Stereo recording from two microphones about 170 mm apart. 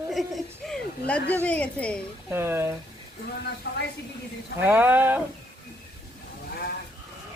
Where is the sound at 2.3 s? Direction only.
15° right (ahead or behind).